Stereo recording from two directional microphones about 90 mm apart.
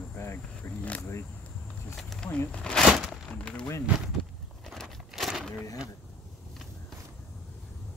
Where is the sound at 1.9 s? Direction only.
5° left (ahead or behind).